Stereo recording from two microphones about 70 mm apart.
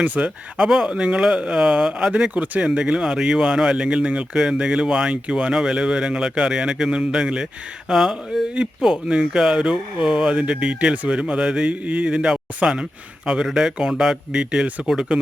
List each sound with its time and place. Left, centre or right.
0.0 s speech: right
0.5 s speech: centre
2.3 s speech: right